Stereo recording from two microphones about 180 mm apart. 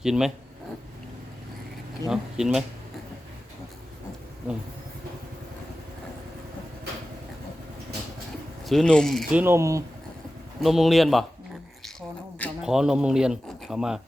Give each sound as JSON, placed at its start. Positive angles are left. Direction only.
{"t": 0.0, "sound": "speech", "side_deg": -5}
{"t": 2.0, "sound": "speech", "side_deg": -5}
{"t": 8.6, "sound": "speech", "side_deg": 5}
{"t": 9.4, "sound": "speech", "side_deg": -15}
{"t": 10.6, "sound": "speech", "side_deg": 0}
{"t": 12.4, "sound": "speech", "side_deg": -5}